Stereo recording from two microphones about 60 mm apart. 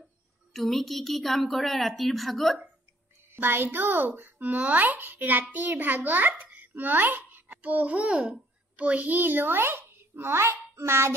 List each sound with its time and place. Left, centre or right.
0.5 s a woman's voice: centre
3.3 s a child's voice: right